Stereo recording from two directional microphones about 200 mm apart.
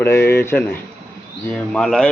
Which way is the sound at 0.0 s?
10° left (ahead or behind).